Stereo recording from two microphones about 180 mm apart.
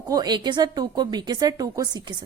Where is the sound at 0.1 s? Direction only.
25° right (ahead or behind).